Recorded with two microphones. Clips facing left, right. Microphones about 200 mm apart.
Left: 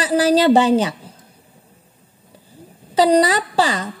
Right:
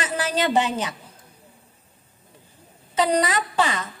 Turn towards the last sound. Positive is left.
turn(degrees=35)  # may be behind; listen again after turning